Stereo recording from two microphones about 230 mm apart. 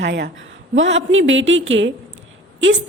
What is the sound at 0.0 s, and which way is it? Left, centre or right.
A woman's voice, right.